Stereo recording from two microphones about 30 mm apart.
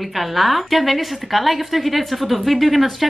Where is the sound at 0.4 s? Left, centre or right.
Centre.